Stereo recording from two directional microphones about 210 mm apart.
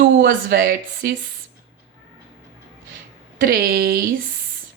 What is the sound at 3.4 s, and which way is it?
Speech, 45° right (ahead or behind).